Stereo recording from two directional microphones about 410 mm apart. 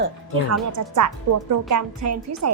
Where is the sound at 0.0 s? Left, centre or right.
Right.